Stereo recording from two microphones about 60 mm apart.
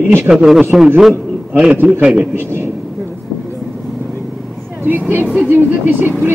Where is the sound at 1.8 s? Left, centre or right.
Centre.